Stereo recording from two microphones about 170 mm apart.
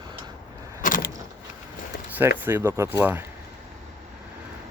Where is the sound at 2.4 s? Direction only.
15° right (ahead or behind).